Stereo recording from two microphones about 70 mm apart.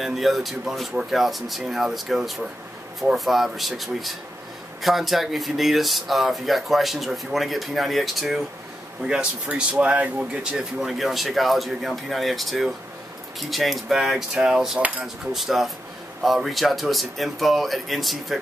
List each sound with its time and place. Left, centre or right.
0.0 s speech: centre
9.0 s speech: centre
10.8 s speech: centre